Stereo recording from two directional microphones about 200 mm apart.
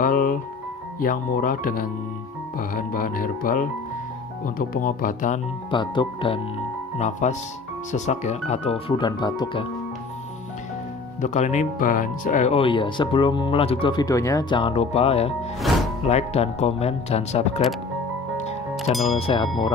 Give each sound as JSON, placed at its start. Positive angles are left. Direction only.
{"t": 0.0, "sound": "music", "side_deg": 45}
{"t": 0.9, "sound": "speech", "side_deg": 45}
{"t": 5.7, "sound": "speech", "side_deg": 25}
{"t": 7.0, "sound": "speech", "side_deg": 35}
{"t": 11.1, "sound": "speech", "side_deg": 35}
{"t": 18.9, "sound": "speech", "side_deg": 0}
{"t": 19.1, "sound": "speech", "side_deg": 25}